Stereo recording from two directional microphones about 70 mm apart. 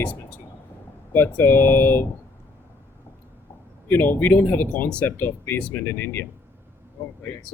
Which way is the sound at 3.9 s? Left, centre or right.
Left.